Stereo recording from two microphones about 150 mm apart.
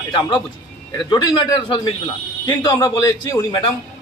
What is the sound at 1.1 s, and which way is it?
A man's voice, 35° left (ahead or behind).